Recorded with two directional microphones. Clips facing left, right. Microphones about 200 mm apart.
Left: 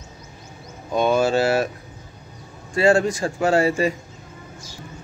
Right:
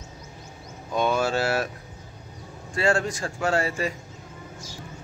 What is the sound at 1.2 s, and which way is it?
Speech, centre (ahead or behind).